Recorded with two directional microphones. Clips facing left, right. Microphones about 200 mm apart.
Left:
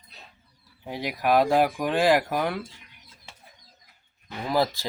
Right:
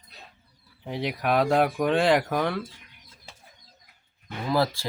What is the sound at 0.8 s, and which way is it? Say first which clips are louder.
Speech: left 1 dB; 5° left (ahead or behind).